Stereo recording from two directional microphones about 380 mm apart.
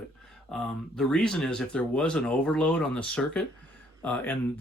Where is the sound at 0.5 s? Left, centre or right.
Centre.